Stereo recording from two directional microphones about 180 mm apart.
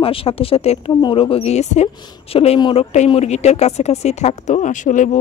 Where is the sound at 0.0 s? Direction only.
30° left (ahead or behind).